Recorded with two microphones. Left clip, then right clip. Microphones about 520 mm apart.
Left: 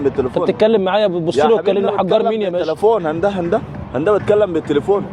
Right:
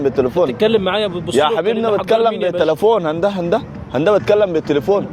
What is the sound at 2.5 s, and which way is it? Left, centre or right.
A man's voice, centre.